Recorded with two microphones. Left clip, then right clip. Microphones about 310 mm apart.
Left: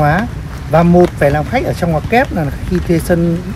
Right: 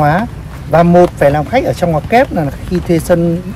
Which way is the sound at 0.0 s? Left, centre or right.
Right.